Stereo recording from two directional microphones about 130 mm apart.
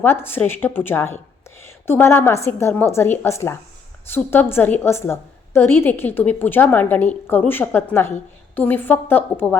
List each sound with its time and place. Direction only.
0.0 s a woman's voice: 15° left (ahead or behind)